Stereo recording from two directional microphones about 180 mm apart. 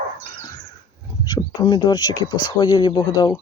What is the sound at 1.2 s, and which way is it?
Speech, 25° left (ahead or behind).